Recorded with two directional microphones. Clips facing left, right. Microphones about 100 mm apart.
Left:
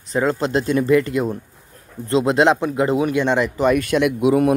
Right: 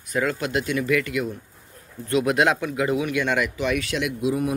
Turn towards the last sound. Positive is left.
turn(degrees=65)  # may be behind; listen again after turning